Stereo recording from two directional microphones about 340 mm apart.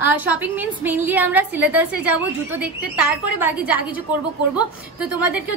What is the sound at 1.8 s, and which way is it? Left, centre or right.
Speech, left.